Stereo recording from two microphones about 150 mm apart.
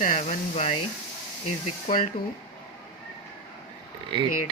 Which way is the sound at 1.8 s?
65° left (ahead or behind).